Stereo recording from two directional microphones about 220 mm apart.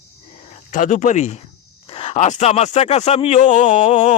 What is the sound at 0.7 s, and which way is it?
Speech, 35° left (ahead or behind).